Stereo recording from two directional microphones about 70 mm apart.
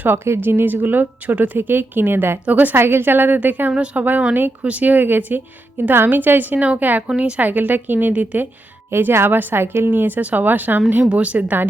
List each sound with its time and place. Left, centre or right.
0.0 s speech: right
8.9 s speech: right